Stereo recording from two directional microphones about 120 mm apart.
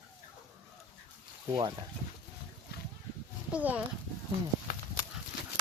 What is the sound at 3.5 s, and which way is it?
Speech, 15° right (ahead or behind).